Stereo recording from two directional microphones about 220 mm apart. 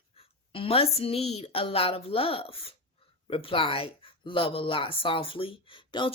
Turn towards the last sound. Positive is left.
turn(degrees=20)  # may be behind; listen again after turning